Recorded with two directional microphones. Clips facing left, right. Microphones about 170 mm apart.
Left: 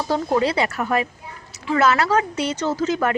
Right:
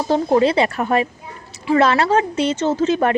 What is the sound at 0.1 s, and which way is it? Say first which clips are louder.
Speech: right 5 dB; 25° right (ahead or behind).